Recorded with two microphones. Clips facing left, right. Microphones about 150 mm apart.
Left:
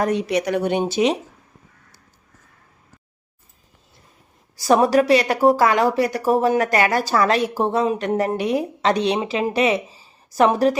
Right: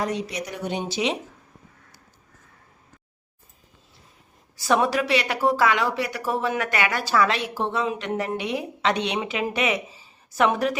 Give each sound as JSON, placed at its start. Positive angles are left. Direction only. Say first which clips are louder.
{"t": 0.0, "sound": "a woman's voice", "louder": "left 7 dB", "side_deg": 60}
{"t": 4.5, "sound": "speech", "louder": "left 6 dB", "side_deg": 40}